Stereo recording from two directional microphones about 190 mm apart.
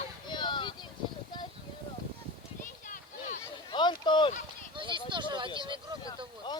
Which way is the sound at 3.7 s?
25° left (ahead or behind).